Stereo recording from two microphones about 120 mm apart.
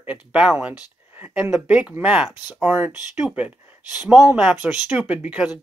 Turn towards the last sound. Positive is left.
turn(degrees=-10)  # may be behind; listen again after turning